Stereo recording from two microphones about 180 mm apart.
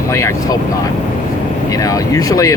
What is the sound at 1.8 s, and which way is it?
Speech, 20° left (ahead or behind).